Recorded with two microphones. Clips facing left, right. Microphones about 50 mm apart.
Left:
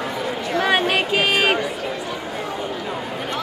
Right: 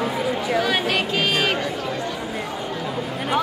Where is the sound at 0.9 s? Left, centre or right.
Centre.